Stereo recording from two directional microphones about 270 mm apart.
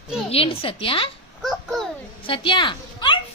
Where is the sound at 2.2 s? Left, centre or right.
Centre.